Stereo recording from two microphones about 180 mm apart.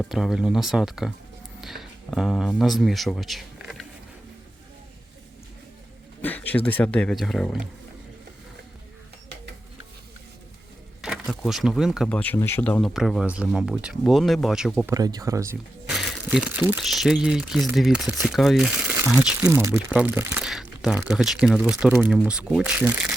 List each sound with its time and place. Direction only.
0.0 s speech: centre (ahead or behind)
6.2 s a sound: 10° left (ahead or behind)
6.7 s speech: 10° left (ahead or behind)
11.0 s speech: centre (ahead or behind)
12.0 s speech: 10° left (ahead or behind)
12.8 s speech: centre (ahead or behind)
14.9 s speech: 20° right (ahead or behind)
15.9 s speech: centre (ahead or behind)